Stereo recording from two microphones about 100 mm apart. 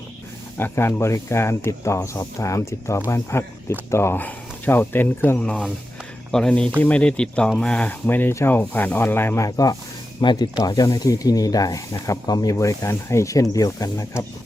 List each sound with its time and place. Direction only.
0.5 s speech: 25° left (ahead or behind)
5.4 s speech: 10° left (ahead or behind)
8.0 s speech: 20° left (ahead or behind)
9.5 s speech: 40° left (ahead or behind)